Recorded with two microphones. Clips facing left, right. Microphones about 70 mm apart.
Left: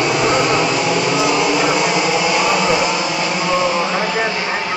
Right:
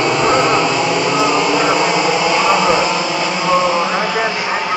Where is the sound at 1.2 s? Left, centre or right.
Right.